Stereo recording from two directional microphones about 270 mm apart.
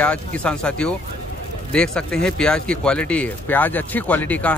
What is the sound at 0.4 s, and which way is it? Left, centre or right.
Speech, centre.